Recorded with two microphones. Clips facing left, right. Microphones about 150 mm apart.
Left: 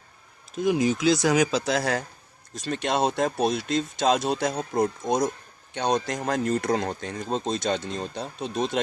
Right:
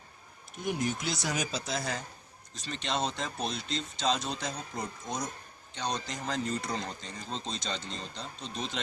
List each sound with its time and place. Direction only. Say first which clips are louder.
0.5 s speech: left 10 dB; 90° left; by 2.0 s 70° left (ahead or behind)
2.6 s speech: left 8 dB; 55° left (ahead or behind)